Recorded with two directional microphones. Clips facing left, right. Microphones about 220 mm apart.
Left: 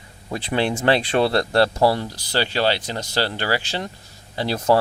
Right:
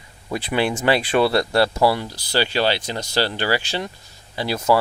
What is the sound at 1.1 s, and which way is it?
Speech, 35° left (ahead or behind).